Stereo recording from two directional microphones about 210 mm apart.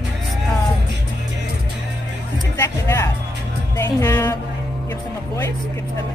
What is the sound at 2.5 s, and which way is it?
Speech, 15° left (ahead or behind).